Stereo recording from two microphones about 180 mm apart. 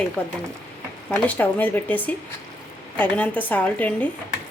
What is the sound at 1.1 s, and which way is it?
A woman's voice, 10° left (ahead or behind).